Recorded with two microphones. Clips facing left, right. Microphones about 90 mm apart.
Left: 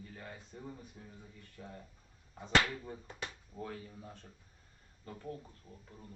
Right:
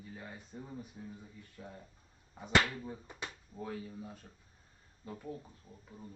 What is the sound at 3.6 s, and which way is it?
Speech, 5° right (ahead or behind).